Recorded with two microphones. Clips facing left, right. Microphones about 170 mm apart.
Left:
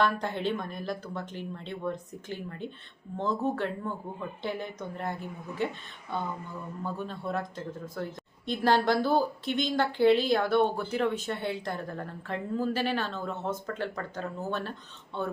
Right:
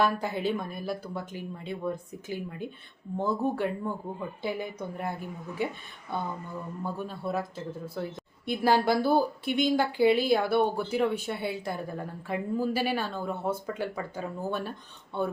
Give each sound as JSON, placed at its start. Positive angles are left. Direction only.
{"t": 0.0, "sound": "speech", "side_deg": -10}